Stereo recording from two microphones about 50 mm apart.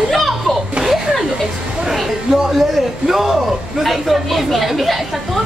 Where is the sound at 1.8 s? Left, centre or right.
Centre.